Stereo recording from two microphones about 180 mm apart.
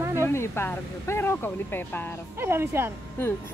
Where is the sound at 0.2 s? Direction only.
15° left (ahead or behind).